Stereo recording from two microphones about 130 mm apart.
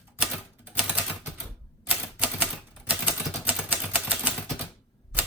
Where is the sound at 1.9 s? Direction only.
10° right (ahead or behind).